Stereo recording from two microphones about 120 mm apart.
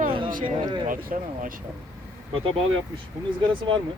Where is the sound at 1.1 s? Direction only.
90° right.